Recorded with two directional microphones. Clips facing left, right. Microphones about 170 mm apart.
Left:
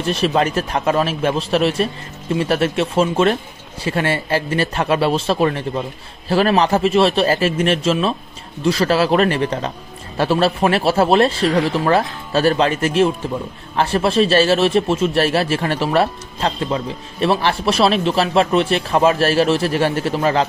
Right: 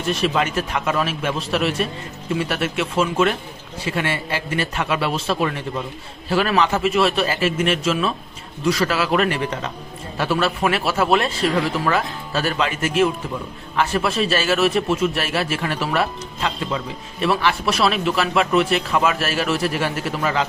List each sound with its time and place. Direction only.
0.0 s a man's voice: 30° left (ahead or behind)